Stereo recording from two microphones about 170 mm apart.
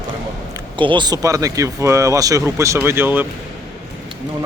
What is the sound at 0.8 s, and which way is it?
Speech, 30° right (ahead or behind).